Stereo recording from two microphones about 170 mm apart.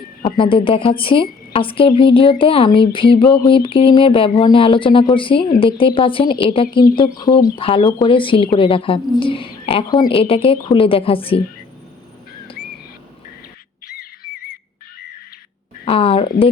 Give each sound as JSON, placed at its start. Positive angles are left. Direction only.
{"t": 0.3, "sound": "speech", "side_deg": 30}
{"t": 15.8, "sound": "speech", "side_deg": 35}